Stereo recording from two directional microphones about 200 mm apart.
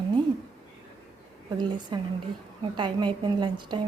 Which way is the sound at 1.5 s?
20° right (ahead or behind).